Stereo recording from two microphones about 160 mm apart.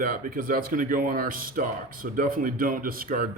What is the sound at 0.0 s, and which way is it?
Speech, 65° right (ahead or behind).